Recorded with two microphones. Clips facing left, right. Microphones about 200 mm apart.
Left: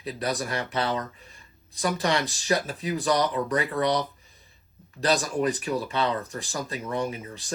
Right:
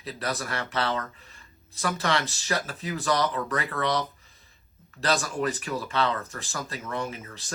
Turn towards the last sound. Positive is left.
turn(degrees=15)  # may be behind; listen again after turning